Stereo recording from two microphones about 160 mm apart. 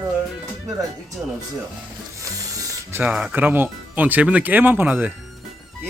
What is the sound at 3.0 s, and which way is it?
Speech, 5° right (ahead or behind).